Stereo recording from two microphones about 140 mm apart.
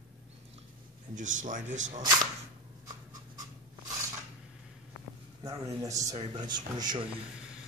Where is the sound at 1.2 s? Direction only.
65° right (ahead or behind).